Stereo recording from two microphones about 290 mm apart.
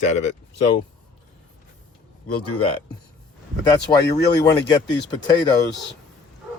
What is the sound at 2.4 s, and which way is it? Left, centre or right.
Speech, left.